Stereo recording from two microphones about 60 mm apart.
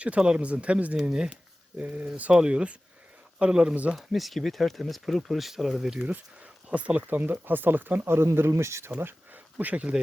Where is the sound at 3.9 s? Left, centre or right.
Centre.